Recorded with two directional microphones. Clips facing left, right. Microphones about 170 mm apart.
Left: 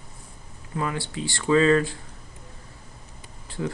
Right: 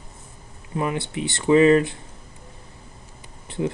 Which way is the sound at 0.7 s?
20° right (ahead or behind).